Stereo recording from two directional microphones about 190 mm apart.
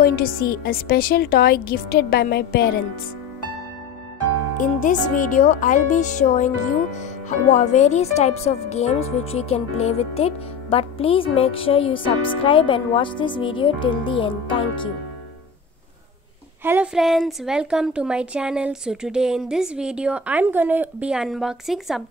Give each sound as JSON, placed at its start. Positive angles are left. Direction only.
{"t": 0.0, "sound": "a woman's voice", "side_deg": 50}
{"t": 4.6, "sound": "a woman's voice", "side_deg": 40}
{"t": 16.6, "sound": "speech", "side_deg": -5}